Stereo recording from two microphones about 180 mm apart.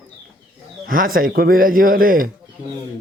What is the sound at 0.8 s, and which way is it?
Speech, 50° right (ahead or behind).